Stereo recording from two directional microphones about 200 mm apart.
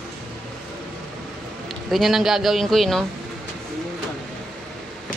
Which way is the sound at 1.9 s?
Centre (ahead or behind).